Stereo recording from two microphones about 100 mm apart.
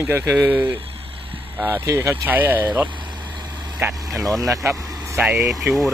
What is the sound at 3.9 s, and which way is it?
Speech, centre (ahead or behind).